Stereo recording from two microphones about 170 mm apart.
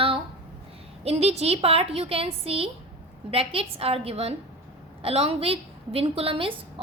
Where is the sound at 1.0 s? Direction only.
40° right (ahead or behind).